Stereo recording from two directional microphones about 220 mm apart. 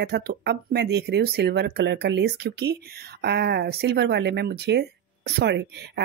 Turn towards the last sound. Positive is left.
turn(degrees=-50)  # may be behind; listen again after turning